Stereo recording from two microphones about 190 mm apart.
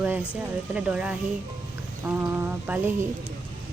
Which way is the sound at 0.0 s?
10° right (ahead or behind).